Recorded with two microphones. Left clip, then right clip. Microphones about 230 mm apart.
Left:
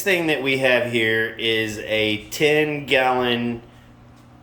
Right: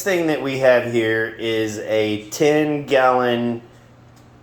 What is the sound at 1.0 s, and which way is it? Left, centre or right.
Speech, centre.